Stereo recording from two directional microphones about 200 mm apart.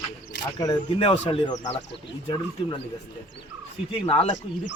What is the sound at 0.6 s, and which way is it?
Speech, 20° left (ahead or behind).